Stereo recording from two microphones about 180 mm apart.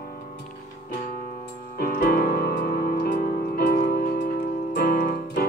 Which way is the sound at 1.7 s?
55° left (ahead or behind).